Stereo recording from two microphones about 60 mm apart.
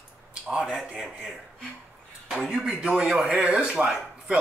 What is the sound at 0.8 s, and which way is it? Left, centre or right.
Speech, centre.